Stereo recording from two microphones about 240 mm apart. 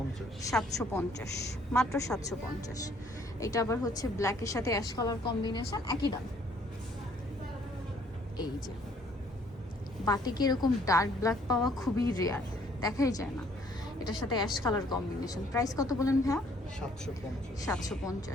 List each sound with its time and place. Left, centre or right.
0.5 s a woman's voice: centre
1.9 s a woman's voice: centre
3.4 s a woman's voice: centre
10.1 s a woman's voice: centre
17.6 s a woman's voice: centre